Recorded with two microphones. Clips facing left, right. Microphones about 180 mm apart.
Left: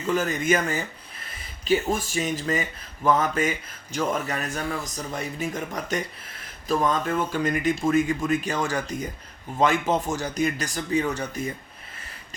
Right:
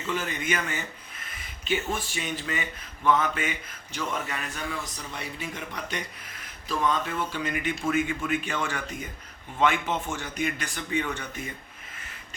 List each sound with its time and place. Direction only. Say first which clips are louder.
0.0 s speech: left 6 dB; 40° left (ahead or behind)